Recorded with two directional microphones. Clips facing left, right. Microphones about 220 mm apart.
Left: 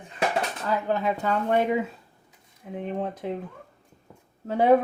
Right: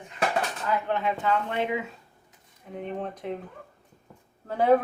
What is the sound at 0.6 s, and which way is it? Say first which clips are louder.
Speech: left 3 dB; 35° left (ahead or behind).